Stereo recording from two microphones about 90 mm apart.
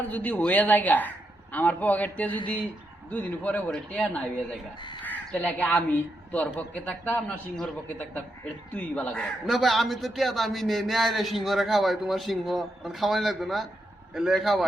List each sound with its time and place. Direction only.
0.1 s a woman's voice: 15° left (ahead or behind)
9.1 s a man's voice: centre (ahead or behind)